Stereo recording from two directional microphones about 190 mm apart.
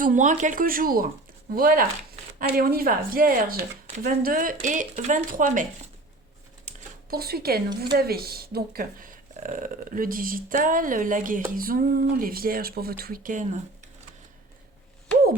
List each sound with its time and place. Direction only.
0.0 s speech: 40° right (ahead or behind)
6.7 s a sound: 55° right (ahead or behind)
7.9 s speech: 55° right (ahead or behind)